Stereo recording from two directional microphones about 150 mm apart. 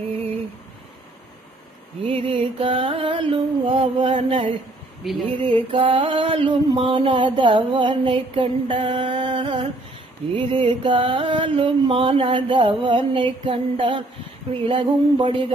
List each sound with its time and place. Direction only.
2.0 s music: 40° right (ahead or behind)
5.0 s speech: centre (ahead or behind)
5.4 s mantra: 35° right (ahead or behind)